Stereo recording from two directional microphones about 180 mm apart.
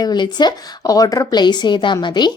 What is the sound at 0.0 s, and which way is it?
A woman's voice, 25° left (ahead or behind).